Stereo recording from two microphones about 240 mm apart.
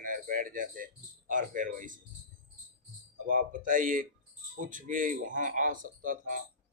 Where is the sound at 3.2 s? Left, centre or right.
Right.